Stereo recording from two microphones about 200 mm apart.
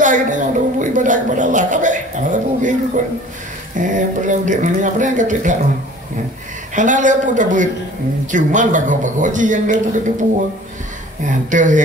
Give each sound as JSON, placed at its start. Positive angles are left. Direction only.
{"t": 0.0, "sound": "a sound", "side_deg": -40}
{"t": 3.7, "sound": "speech", "side_deg": -40}
{"t": 6.7, "sound": "speech", "side_deg": -40}
{"t": 11.2, "sound": "speech", "side_deg": -40}